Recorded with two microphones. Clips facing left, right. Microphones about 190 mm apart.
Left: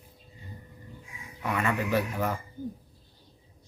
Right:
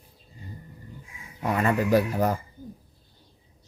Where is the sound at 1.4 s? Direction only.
40° right (ahead or behind).